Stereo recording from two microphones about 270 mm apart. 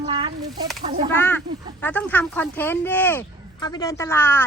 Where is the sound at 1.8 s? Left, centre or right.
Centre.